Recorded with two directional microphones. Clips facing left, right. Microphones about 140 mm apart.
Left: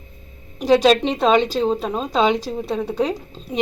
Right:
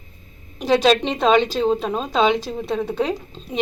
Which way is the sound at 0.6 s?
10° left (ahead or behind).